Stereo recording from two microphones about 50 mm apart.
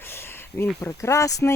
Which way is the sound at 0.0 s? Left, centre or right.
Left.